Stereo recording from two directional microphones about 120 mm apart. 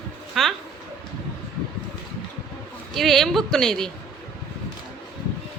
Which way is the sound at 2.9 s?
Centre (ahead or behind).